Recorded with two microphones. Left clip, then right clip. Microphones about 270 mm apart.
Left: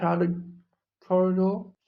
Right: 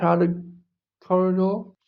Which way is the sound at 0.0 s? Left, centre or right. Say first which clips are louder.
Right 5 dB; right.